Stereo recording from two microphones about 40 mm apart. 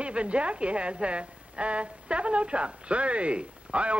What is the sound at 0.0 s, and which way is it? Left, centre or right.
A woman's voice, right.